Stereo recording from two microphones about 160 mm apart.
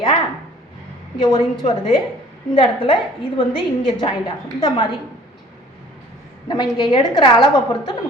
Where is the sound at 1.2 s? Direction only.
25° left (ahead or behind).